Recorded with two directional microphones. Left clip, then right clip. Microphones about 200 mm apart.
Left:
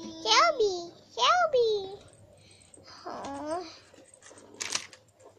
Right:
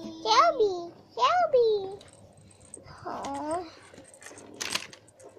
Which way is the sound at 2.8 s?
Centre (ahead or behind).